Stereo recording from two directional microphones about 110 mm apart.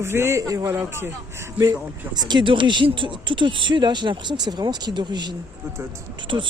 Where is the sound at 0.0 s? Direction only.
25° right (ahead or behind).